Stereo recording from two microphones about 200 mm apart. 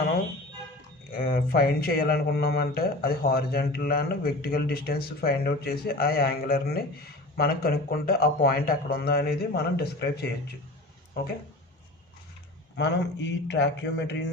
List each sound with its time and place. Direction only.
1.1 s speech: 45° left (ahead or behind)
12.7 s speech: 60° left (ahead or behind)